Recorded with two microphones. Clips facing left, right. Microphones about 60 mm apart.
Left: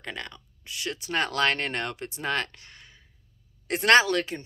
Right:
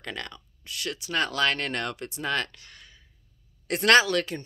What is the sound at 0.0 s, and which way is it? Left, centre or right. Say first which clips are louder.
Speech: right 1 dB; centre.